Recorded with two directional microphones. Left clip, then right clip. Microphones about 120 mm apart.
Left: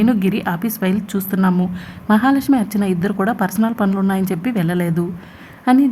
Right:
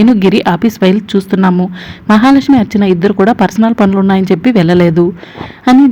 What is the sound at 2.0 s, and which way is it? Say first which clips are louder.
A woman's voice: right 8 dB; 35° right (ahead or behind).